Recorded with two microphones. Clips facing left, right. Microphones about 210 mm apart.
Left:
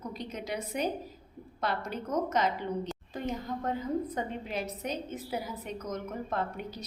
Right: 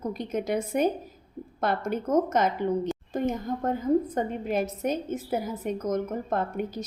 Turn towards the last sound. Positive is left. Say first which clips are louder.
# right 6 dB
turn(degrees=-50)  # may be behind; listen again after turning